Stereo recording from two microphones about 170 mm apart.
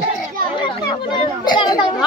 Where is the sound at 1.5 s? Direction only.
25° left (ahead or behind).